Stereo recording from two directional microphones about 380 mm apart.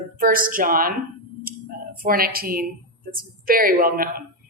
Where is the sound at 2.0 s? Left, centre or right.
Right.